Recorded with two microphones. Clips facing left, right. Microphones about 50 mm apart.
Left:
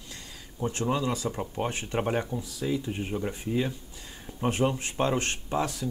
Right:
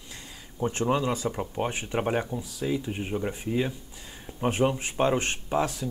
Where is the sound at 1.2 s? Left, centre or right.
Centre.